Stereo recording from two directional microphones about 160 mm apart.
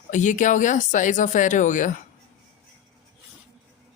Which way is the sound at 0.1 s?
50° left (ahead or behind).